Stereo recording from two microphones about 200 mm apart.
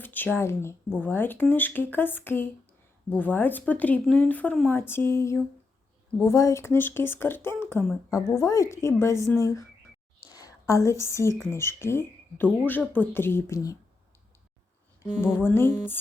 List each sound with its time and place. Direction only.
0.0 s speech: 10° left (ahead or behind)
10.2 s a sound: 15° left (ahead or behind)
11.5 s speech: 10° left (ahead or behind)
15.4 s speech: 10° left (ahead or behind)